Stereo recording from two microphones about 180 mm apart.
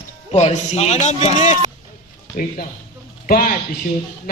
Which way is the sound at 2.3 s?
50° left (ahead or behind).